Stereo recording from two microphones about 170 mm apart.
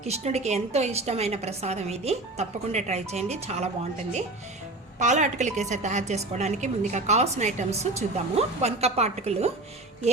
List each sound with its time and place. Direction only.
0.0 s a woman's voice: 40° right (ahead or behind)
4.9 s a woman's voice: 45° right (ahead or behind)